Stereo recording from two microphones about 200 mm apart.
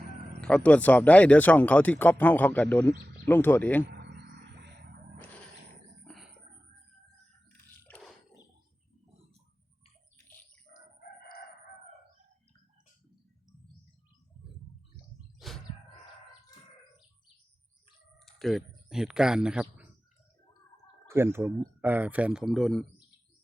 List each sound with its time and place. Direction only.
0.4 s speech: 5° left (ahead or behind)
3.8 s bird: 60° right (ahead or behind)
5.1 s a sound: 5° left (ahead or behind)
7.9 s a sound: 5° left (ahead or behind)
11.0 s crowing: 55° left (ahead or behind)
15.4 s a sound: centre (ahead or behind)
18.3 s typing: centre (ahead or behind)
18.9 s speech: 5° right (ahead or behind)
21.1 s speech: 10° right (ahead or behind)